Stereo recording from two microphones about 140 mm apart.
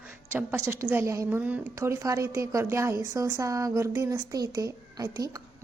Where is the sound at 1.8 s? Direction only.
20° right (ahead or behind).